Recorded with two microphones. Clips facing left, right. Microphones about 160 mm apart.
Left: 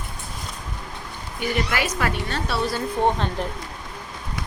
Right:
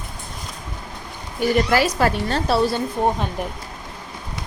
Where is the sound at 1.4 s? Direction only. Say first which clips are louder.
Right 7 dB; 35° right (ahead or behind).